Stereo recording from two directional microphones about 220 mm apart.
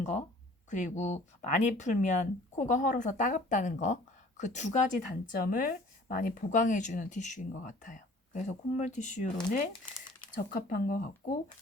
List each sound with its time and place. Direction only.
0.7 s a woman's voice: 35° left (ahead or behind)